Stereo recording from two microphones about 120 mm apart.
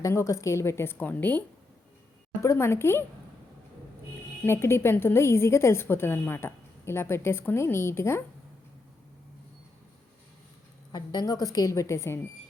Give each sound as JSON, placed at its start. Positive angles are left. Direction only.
{"t": 0.0, "sound": "a woman's voice", "side_deg": 25}
{"t": 4.4, "sound": "a woman's voice", "side_deg": 20}
{"t": 10.9, "sound": "a woman's voice", "side_deg": 35}